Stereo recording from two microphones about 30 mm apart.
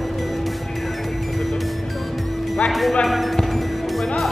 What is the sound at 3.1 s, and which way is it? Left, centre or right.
Music, centre.